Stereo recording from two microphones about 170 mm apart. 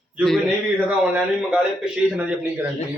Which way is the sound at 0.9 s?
5° right (ahead or behind).